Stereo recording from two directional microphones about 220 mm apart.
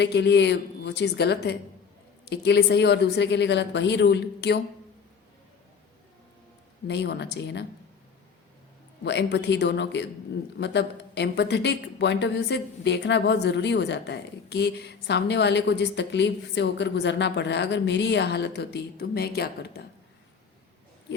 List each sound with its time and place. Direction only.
0.0 s speech: 50° left (ahead or behind)
6.8 s speech: 50° left (ahead or behind)
9.0 s speech: 50° left (ahead or behind)